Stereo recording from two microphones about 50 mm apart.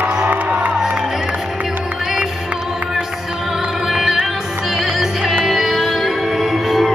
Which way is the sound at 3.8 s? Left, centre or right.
Centre.